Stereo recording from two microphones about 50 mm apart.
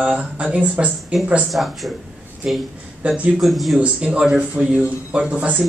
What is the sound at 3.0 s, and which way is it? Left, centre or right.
Speech, right.